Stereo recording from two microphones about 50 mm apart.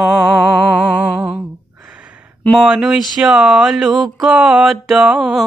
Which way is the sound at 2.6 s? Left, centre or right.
Centre.